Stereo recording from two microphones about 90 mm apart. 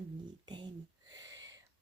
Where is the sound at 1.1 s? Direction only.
45° right (ahead or behind).